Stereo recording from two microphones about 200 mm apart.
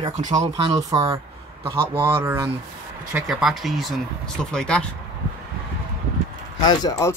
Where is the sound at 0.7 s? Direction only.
15° right (ahead or behind); by 4.8 s 5° left (ahead or behind).